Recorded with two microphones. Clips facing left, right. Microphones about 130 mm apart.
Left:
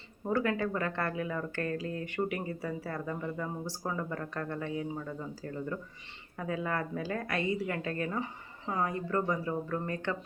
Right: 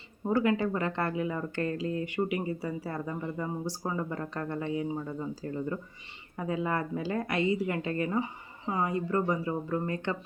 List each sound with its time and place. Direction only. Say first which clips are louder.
0.3 s a woman's voice: right 3 dB; 20° right (ahead or behind)